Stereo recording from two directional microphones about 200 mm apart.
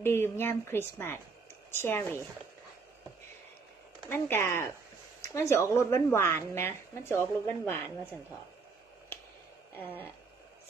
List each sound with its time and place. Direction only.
0.0 s a woman's voice: 10° left (ahead or behind)
4.1 s a woman's voice: 10° left (ahead or behind)
9.8 s a woman's voice: 10° left (ahead or behind)